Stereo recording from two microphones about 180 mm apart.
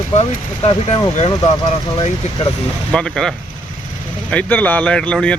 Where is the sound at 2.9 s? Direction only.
5° left (ahead or behind).